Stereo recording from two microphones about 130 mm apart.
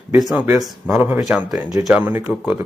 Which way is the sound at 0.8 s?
10° right (ahead or behind).